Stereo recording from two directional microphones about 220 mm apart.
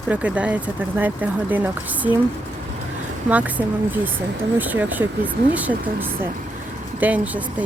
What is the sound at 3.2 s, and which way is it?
Speech, 5° right (ahead or behind).